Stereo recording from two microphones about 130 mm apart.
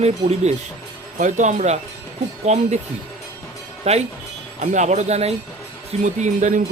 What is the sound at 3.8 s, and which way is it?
Speech, 55° right (ahead or behind).